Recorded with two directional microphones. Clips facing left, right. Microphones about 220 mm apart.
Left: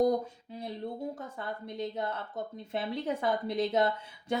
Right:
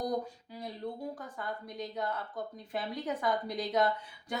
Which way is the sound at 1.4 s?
25° left (ahead or behind).